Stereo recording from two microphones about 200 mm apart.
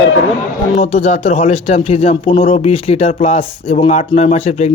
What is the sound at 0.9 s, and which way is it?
Speech, 30° left (ahead or behind).